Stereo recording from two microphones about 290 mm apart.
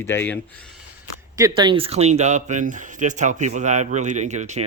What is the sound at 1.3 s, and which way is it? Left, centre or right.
Speech, centre.